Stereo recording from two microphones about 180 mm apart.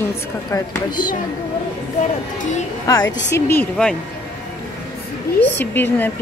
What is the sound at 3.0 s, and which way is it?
Speech, 90° left.